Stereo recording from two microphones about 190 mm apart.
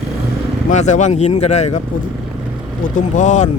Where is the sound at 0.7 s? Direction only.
40° left (ahead or behind).